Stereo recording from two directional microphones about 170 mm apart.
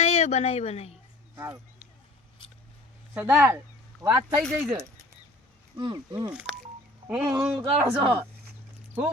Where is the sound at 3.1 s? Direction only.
10° right (ahead or behind).